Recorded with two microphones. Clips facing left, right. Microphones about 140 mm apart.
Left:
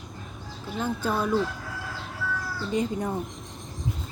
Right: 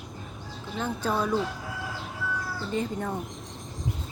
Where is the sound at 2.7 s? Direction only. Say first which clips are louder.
Left 3 dB; 15° left (ahead or behind).